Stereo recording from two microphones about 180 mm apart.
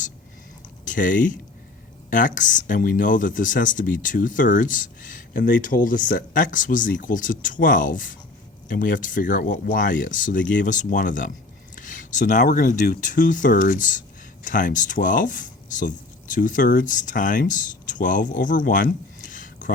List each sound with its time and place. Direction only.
0.9 s speech: 45° left (ahead or behind)